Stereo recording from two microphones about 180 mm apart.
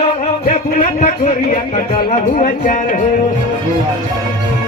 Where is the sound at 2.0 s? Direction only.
35° left (ahead or behind).